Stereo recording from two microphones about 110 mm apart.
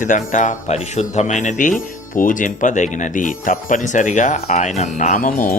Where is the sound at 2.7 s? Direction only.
90° left.